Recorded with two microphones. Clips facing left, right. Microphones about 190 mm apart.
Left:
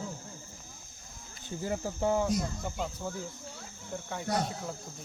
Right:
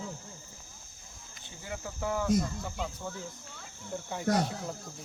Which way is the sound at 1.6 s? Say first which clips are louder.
Left 6 dB; 40° left (ahead or behind).